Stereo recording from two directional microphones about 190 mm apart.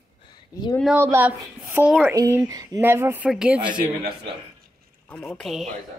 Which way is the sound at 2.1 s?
15° right (ahead or behind).